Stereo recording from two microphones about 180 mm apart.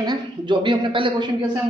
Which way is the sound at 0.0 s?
25° right (ahead or behind).